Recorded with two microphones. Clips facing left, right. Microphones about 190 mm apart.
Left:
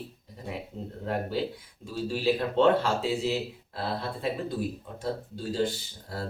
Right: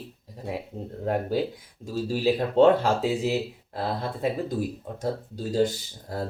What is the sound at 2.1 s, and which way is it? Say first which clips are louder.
Speech: right 3 dB; 40° right (ahead or behind).